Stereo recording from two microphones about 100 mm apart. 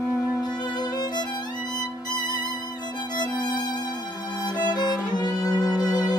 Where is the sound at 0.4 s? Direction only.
45° left (ahead or behind).